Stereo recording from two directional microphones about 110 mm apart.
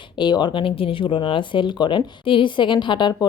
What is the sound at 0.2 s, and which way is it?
Speech, 40° left (ahead or behind).